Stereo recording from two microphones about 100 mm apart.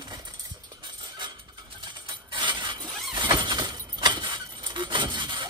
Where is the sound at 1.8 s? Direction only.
50° right (ahead or behind).